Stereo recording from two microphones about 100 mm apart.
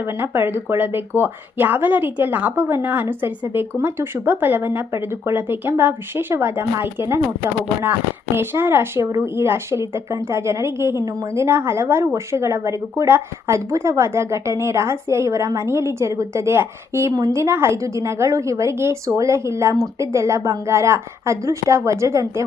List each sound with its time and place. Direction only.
0.0 s a woman's voice: 25° right (ahead or behind)